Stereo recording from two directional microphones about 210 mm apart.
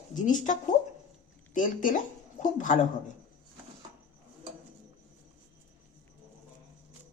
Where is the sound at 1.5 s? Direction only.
40° left (ahead or behind).